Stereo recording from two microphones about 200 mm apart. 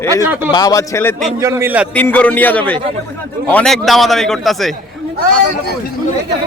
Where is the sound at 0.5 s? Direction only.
20° left (ahead or behind).